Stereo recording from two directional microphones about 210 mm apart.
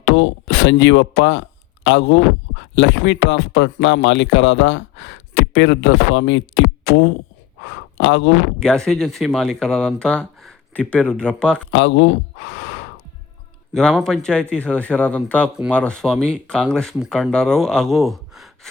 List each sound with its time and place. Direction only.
0.1 s speech: 60° left (ahead or behind)
8.5 s speech: 5° left (ahead or behind)
11.7 s speech: 60° left (ahead or behind)
13.7 s speech: centre (ahead or behind)